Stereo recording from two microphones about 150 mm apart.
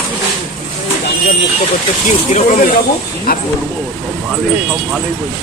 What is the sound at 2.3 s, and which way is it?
Speech, 55° left (ahead or behind).